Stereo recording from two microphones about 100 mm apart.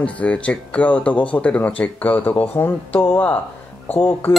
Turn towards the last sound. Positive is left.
turn(degrees=20)  # may be behind; listen again after turning